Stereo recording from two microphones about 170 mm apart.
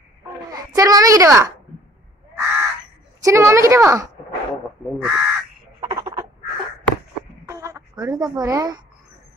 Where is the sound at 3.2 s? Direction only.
15° right (ahead or behind).